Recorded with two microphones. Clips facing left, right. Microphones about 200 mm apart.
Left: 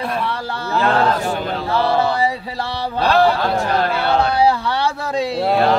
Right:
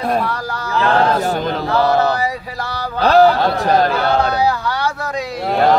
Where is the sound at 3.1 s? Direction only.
40° right (ahead or behind).